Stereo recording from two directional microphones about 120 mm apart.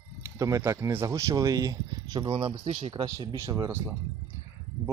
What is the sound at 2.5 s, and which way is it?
Speech, 55° right (ahead or behind).